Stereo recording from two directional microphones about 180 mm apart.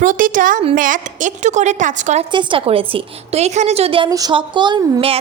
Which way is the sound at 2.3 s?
25° right (ahead or behind).